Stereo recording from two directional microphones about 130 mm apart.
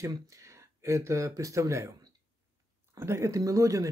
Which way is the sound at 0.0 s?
25° right (ahead or behind).